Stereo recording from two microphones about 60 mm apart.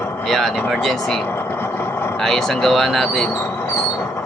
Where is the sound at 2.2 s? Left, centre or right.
Centre.